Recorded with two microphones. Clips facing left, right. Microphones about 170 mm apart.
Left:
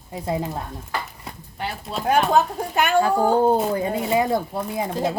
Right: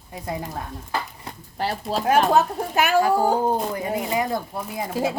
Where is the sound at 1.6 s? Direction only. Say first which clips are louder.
Right 4 dB; 35° right (ahead or behind).